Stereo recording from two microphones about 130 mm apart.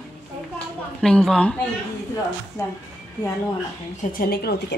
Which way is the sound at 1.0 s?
5° left (ahead or behind).